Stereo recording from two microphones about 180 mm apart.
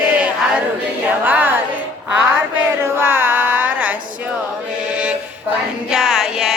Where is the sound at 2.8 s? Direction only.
10° right (ahead or behind).